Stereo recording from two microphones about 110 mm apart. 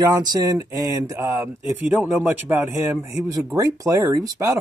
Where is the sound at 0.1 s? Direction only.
35° right (ahead or behind); by 3.0 s 15° right (ahead or behind).